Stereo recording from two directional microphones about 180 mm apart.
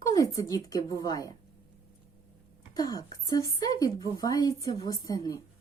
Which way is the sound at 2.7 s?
20° left (ahead or behind).